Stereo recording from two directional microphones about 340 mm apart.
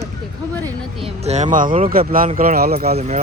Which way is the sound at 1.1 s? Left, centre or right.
Centre.